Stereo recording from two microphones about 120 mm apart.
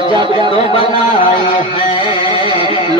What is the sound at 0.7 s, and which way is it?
Speech, 50° left (ahead or behind).